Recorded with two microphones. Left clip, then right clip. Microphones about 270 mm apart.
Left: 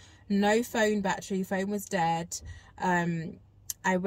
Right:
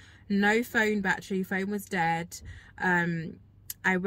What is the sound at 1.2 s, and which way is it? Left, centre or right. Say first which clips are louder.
Speech: even; left.